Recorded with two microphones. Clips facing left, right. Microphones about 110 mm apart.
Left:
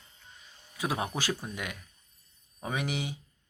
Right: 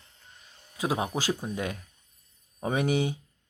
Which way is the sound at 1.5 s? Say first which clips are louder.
Right 6 dB; 30° right (ahead or behind).